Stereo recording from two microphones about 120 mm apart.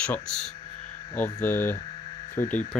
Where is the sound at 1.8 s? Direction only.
45° left (ahead or behind).